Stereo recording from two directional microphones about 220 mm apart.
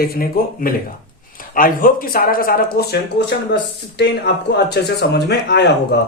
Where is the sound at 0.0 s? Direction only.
40° left (ahead or behind).